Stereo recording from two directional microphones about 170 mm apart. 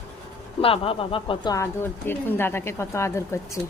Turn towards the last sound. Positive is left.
turn(degrees=15)  # may be behind; listen again after turning